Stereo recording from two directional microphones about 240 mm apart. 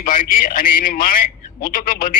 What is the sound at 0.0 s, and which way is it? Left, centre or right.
A man's voice, left.